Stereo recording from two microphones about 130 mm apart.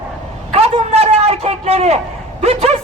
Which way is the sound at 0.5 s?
50° right (ahead or behind).